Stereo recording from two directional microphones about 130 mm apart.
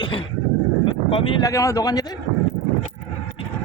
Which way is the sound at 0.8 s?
45° left (ahead or behind).